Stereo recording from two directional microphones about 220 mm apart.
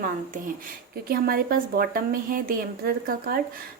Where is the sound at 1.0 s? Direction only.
45° right (ahead or behind).